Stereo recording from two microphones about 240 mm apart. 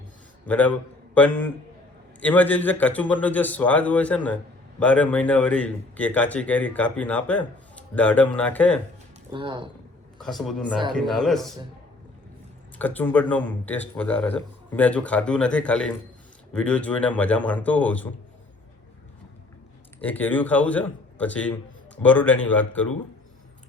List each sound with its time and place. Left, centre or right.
0.4 s a man's voice: centre
9.3 s speech: right
10.2 s a man's voice: centre
12.8 s a man's voice: centre
20.0 s speech: centre